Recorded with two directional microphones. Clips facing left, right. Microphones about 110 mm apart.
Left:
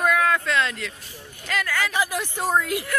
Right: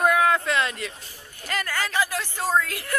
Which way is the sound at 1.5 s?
5° right (ahead or behind).